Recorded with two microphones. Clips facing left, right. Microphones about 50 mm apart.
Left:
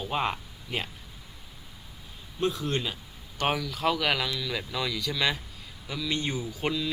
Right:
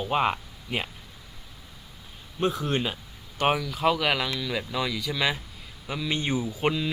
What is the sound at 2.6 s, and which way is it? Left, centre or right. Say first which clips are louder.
Speech: right 3 dB; centre.